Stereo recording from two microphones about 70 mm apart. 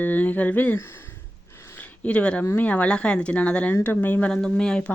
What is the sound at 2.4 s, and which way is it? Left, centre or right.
Speech, left.